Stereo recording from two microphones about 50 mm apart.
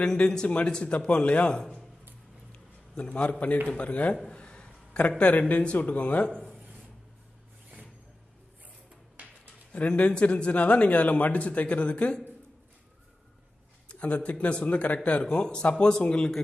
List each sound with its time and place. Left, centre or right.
0.0 s speech: centre
3.0 s speech: left
9.7 s speech: left
13.8 s speech: left
15.2 s speech: centre